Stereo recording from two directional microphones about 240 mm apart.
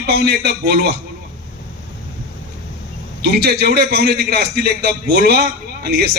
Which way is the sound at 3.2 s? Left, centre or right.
Right.